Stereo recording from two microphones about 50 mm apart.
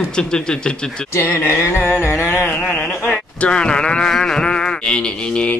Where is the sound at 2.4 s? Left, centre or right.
Left.